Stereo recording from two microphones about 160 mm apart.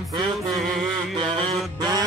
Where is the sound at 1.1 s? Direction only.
35° right (ahead or behind).